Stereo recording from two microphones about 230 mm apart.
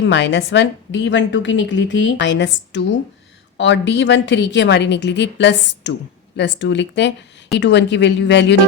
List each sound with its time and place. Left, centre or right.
0.0 s a woman's voice: left